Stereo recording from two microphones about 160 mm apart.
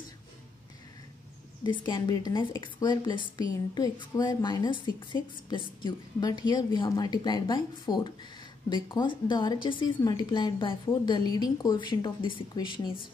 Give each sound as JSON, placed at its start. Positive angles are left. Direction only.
{"t": 1.6, "sound": "speech", "side_deg": 30}